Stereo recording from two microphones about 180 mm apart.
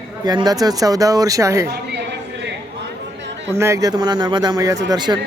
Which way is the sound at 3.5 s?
15° right (ahead or behind).